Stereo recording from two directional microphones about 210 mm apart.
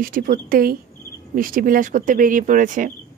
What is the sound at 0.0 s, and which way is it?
A woman's voice, 45° right (ahead or behind).